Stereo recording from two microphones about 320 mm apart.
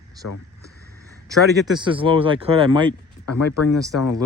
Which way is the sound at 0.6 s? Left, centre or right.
Centre.